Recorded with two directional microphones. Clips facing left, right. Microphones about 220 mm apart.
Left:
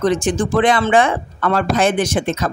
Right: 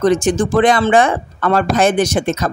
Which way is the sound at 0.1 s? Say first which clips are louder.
Right 3 dB; 40° right (ahead or behind).